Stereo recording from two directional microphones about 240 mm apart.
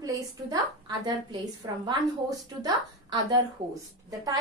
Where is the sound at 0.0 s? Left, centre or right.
Centre.